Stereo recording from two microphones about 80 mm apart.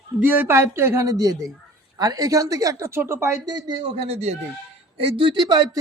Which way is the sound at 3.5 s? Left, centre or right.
Right.